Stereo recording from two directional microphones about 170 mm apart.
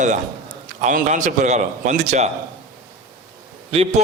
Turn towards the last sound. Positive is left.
turn(degrees=-35)  # may be behind; listen again after turning